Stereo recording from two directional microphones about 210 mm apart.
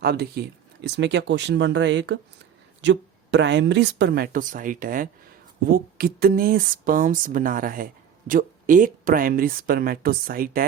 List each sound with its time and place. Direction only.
0.0 s speech: 50° right (ahead or behind)